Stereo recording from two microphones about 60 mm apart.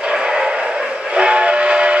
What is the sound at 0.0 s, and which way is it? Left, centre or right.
Train, centre.